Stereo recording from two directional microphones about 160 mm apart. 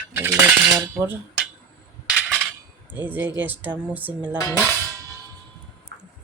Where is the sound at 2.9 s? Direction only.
10° right (ahead or behind).